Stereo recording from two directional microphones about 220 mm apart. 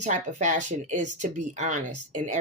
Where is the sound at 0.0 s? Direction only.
30° right (ahead or behind).